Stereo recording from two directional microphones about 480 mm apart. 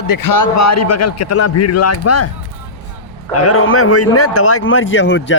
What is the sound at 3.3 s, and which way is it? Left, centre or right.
A man's voice, left.